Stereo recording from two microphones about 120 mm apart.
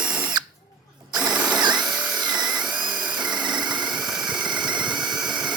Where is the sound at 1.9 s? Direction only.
5° right (ahead or behind).